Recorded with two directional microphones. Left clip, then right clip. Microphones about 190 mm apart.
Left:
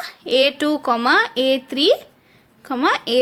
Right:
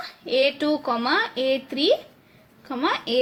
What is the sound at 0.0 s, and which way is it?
A woman's voice, 35° left (ahead or behind).